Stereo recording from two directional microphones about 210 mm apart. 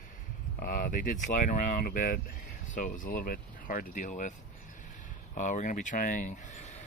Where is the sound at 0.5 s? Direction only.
40° left (ahead or behind).